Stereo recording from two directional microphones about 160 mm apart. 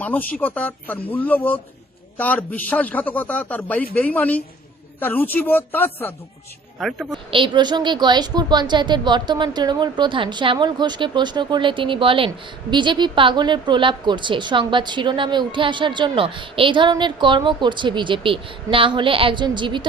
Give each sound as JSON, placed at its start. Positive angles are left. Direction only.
{"t": 0.0, "sound": "a man's voice", "side_deg": 10}
{"t": 6.7, "sound": "a woman's voice", "side_deg": 0}
{"t": 7.1, "sound": "a woman's voice", "side_deg": -30}